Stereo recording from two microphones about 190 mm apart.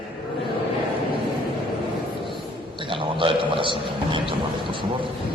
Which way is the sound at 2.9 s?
30° right (ahead or behind).